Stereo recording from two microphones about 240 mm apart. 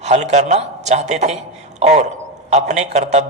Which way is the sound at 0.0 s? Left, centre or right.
Right.